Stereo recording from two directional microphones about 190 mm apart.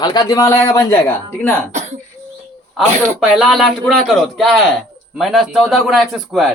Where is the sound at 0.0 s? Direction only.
20° left (ahead or behind).